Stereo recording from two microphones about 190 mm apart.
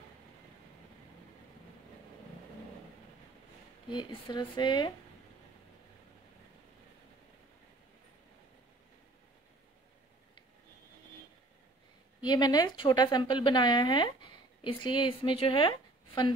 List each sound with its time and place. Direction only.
3.9 s speech: 25° left (ahead or behind)
12.2 s speech: 20° left (ahead or behind)